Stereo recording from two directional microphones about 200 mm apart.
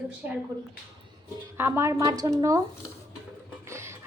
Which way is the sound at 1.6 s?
10° right (ahead or behind).